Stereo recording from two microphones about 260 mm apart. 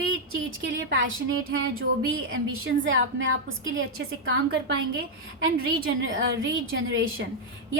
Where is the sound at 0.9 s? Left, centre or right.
Right.